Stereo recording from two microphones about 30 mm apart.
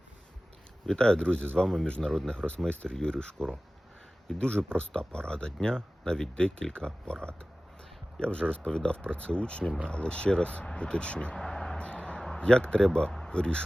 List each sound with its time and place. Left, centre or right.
0.9 s speech: left
1.6 s speech: centre
4.4 s speech: left
11.3 s a sound: centre
11.8 s a sound: left
12.4 s speech: left